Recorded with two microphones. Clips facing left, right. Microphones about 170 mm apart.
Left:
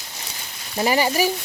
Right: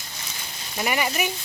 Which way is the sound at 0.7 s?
30° left (ahead or behind).